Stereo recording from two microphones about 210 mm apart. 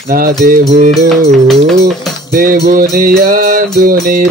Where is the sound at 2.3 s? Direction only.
45° right (ahead or behind).